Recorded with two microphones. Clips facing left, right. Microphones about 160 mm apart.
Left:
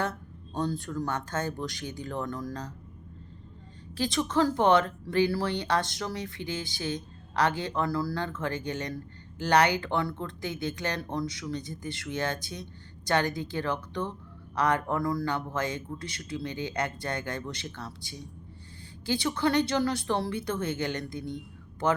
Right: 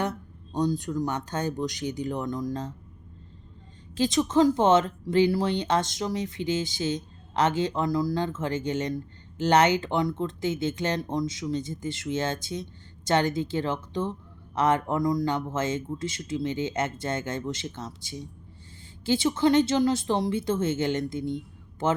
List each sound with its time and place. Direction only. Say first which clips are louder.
0.0 s speech: right 2 dB; 15° right (ahead or behind)
3.9 s a woman's voice: right 5 dB; 20° right (ahead or behind)